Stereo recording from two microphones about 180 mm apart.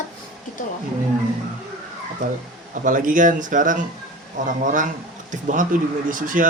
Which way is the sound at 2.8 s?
50° right (ahead or behind).